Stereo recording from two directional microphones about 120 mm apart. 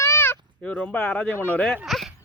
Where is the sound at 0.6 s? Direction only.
10° left (ahead or behind).